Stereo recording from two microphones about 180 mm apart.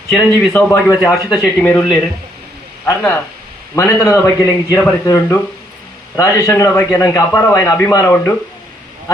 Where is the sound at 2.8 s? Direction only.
10° left (ahead or behind).